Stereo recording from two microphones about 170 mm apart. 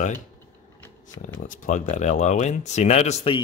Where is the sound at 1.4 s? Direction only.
50° left (ahead or behind).